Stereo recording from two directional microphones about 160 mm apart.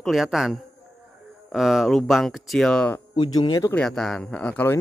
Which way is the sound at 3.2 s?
30° left (ahead or behind).